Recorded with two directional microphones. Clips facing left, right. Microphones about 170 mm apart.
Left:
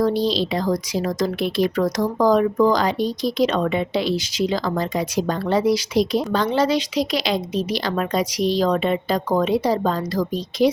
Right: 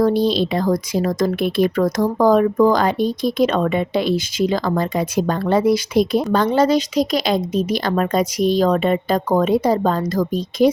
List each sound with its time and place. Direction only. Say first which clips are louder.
0.0 s speech: right 3 dB; 55° right (ahead or behind)